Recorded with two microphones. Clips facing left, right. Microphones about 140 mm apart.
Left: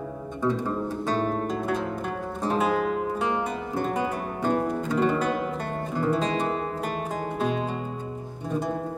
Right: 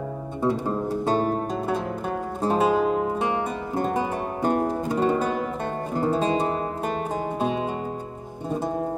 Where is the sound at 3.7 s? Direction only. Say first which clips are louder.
Right 2 dB; 40° right (ahead or behind).